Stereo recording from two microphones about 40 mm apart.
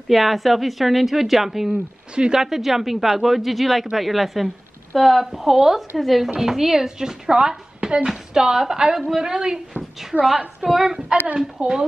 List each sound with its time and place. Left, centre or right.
0.1 s a woman's voice: centre
2.1 s speech: right
2.4 s a woman's voice: centre
10.6 s speech: centre
11.6 s speech: right